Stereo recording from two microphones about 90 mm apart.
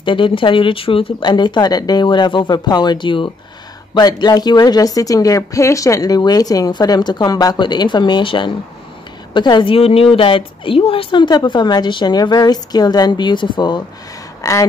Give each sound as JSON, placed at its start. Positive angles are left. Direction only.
{"t": 0.0, "sound": "a woman's voice", "side_deg": 65}
{"t": 1.2, "sound": "a woman's voice", "side_deg": 55}
{"t": 3.9, "sound": "a woman's voice", "side_deg": 50}
{"t": 9.3, "sound": "a woman's voice", "side_deg": 55}
{"t": 14.4, "sound": "a sound", "side_deg": 35}